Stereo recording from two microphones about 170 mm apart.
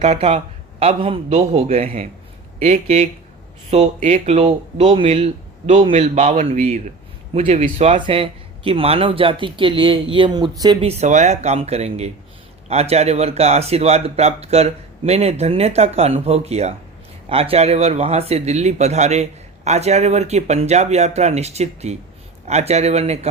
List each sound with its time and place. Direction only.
0.0 s speech: 40° right (ahead or behind)
7.9 s speech: 30° right (ahead or behind)